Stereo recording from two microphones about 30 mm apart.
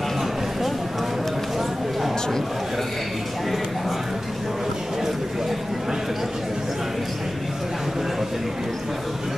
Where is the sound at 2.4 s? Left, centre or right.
Centre.